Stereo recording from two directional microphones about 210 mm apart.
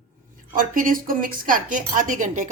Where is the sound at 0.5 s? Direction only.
40° right (ahead or behind).